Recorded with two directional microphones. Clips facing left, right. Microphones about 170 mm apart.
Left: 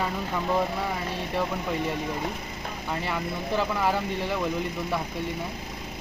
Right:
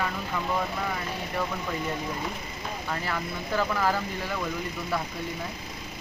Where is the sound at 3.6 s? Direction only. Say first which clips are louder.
Even; 20° left (ahead or behind).